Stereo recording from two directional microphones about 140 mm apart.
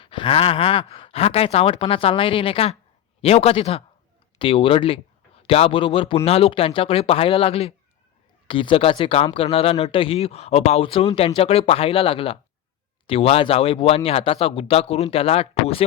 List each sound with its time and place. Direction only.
0.0 s speech: 40° left (ahead or behind)